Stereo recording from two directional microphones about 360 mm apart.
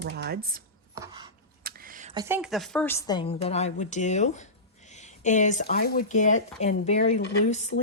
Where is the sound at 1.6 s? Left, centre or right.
Right.